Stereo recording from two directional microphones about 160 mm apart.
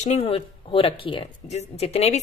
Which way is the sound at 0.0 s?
40° left (ahead or behind).